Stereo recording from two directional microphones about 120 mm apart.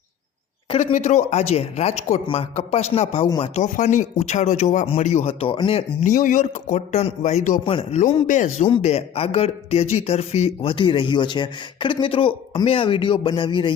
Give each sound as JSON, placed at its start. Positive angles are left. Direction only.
{"t": 0.8, "sound": "speech", "side_deg": 80}
{"t": 2.2, "sound": "speech", "side_deg": 50}
{"t": 2.6, "sound": "speech", "side_deg": 60}
{"t": 3.4, "sound": "speech", "side_deg": 70}
{"t": 4.9, "sound": "speech", "side_deg": 65}
{"t": 6.2, "sound": "a man's voice", "side_deg": 85}
{"t": 7.6, "sound": "speech", "side_deg": 50}
{"t": 8.8, "sound": "speech", "side_deg": 60}